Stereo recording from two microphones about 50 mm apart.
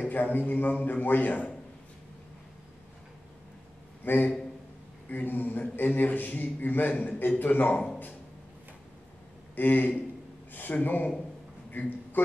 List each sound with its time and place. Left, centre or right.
0.1 s a man's voice: left
4.0 s a man's voice: left
9.6 s a man's voice: left